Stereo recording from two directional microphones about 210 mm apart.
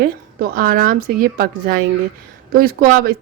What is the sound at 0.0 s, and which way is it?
Speech, 40° right (ahead or behind).